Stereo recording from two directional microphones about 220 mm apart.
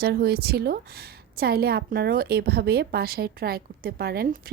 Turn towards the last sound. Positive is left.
turn(degrees=-45)  # may be behind; listen again after turning